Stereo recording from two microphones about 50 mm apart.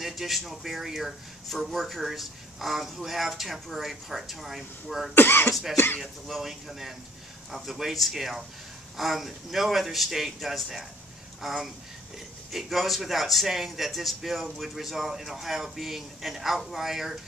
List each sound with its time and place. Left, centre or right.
0.0 s speech: centre
5.1 s speech: left
5.5 s speech: centre